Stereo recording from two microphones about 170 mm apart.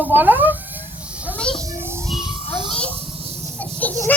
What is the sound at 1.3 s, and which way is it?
Children playing, 5° left (ahead or behind).